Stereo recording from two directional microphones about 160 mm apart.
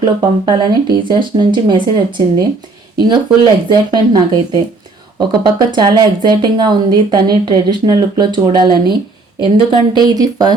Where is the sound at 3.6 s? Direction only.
30° right (ahead or behind).